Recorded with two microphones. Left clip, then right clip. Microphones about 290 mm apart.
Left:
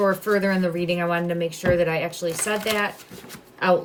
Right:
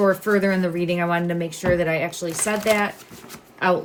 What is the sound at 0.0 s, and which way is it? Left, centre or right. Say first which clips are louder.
A woman's voice: right 2 dB; centre.